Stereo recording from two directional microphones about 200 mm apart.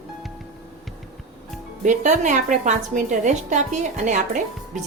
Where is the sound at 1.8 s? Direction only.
40° right (ahead or behind).